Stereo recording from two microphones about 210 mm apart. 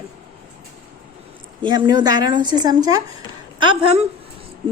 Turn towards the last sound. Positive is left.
turn(degrees=-25)  # may be behind; listen again after turning